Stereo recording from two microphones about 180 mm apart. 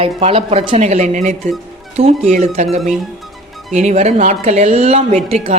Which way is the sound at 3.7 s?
40° right (ahead or behind).